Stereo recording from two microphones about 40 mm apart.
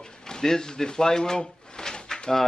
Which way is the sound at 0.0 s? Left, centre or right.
Centre.